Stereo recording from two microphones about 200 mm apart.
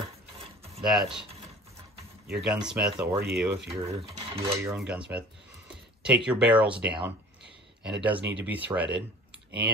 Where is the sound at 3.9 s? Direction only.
30° right (ahead or behind).